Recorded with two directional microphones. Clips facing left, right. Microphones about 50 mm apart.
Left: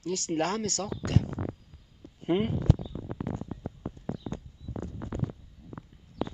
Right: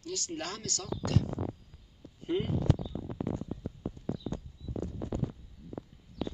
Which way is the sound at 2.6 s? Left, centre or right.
Centre.